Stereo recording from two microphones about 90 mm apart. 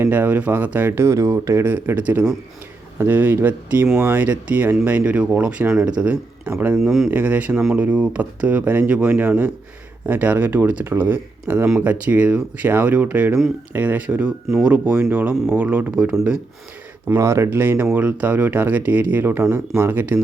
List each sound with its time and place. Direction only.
0.0 s speech: 20° right (ahead or behind)
6.7 s speech: 5° right (ahead or behind)
7.1 s speech: 20° right (ahead or behind)
17.2 s speech: 30° right (ahead or behind)